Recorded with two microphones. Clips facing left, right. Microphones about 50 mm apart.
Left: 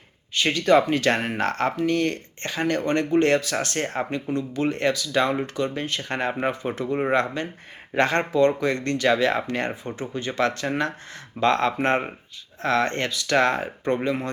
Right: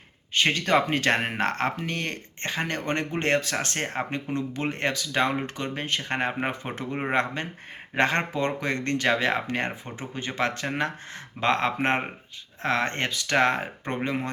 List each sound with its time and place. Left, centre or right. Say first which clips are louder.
0.3 s speech: left 4 dB; right